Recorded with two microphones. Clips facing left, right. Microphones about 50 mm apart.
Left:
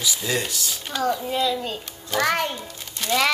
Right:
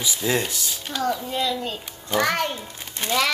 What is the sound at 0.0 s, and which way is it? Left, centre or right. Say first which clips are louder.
Speech: right 2 dB; centre.